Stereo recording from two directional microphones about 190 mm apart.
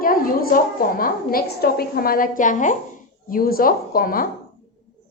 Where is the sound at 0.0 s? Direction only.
50° left (ahead or behind).